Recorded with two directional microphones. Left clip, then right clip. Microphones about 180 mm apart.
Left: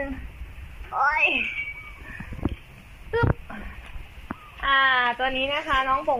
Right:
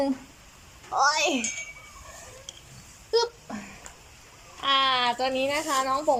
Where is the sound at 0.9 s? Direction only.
15° right (ahead or behind).